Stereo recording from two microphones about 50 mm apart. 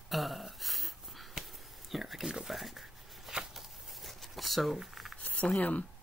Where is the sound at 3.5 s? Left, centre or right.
Centre.